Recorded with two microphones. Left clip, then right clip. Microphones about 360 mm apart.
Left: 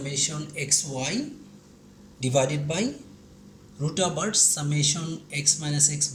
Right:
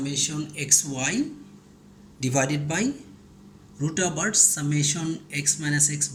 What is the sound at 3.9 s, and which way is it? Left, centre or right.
Speech, centre.